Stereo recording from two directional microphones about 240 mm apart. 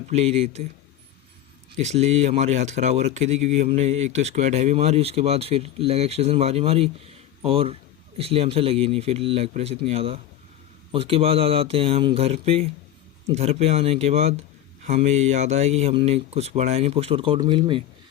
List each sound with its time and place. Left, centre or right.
0.1 s speech: right
1.8 s speech: right